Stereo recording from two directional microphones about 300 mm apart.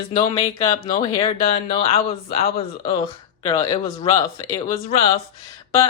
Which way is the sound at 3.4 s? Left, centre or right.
Centre.